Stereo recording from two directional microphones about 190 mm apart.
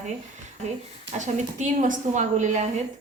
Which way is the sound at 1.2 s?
40° right (ahead or behind).